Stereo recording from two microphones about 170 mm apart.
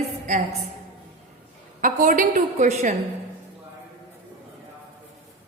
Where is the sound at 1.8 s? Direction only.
55° right (ahead or behind).